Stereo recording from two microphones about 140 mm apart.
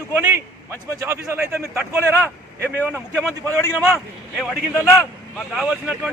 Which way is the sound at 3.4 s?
15° left (ahead or behind).